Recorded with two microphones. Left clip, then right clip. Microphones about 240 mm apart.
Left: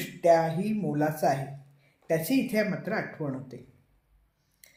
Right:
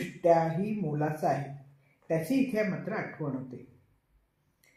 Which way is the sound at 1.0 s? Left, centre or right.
Left.